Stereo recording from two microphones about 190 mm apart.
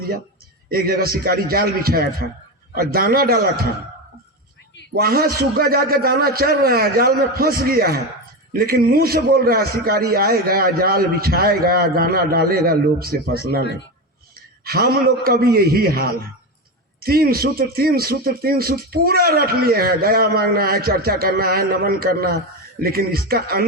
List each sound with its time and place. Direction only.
0.7 s speech: 50° right (ahead or behind)
4.9 s a man's voice: 55° right (ahead or behind)